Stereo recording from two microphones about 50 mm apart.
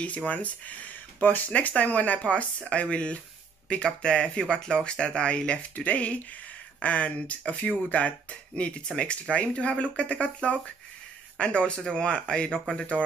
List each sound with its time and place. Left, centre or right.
0.3 s speech: left; by 12.8 s centre